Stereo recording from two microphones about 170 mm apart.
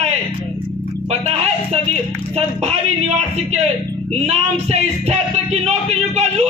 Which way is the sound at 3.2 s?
40° right (ahead or behind).